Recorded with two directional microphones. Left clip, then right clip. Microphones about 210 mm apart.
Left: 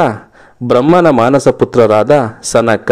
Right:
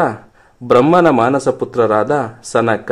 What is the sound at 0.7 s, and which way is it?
A man's voice, 35° left (ahead or behind).